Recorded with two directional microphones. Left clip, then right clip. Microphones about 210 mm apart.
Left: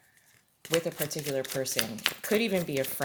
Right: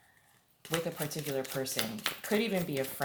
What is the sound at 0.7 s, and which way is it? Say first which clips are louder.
Speech: left 5 dB; 35° left (ahead or behind).